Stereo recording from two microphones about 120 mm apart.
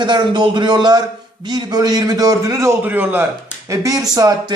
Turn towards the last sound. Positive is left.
turn(degrees=-30)  # may be behind; listen again after turning